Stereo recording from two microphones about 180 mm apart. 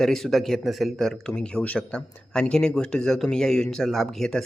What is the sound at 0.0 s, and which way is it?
Speech, centre (ahead or behind).